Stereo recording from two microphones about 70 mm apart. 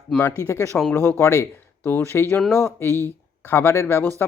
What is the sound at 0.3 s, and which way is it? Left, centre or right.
Speech, left.